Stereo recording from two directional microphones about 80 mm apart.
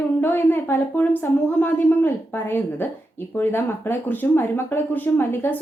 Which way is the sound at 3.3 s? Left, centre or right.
Left.